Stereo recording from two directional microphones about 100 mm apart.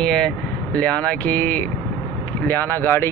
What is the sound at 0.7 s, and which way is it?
Speech, 15° left (ahead or behind).